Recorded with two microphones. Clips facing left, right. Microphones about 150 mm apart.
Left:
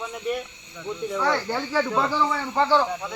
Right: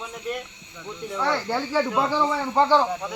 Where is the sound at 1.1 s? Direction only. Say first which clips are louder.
Even; 5° left (ahead or behind).